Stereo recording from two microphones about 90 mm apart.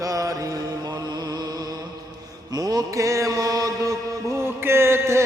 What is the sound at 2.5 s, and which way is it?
Mantra, 45° right (ahead or behind).